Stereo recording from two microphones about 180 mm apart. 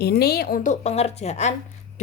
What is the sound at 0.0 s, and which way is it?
Speech, 65° left (ahead or behind).